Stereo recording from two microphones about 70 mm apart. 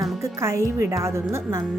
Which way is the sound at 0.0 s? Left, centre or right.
Right.